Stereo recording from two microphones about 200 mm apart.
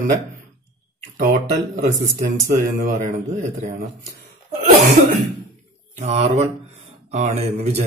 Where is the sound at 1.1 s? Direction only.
45° right (ahead or behind).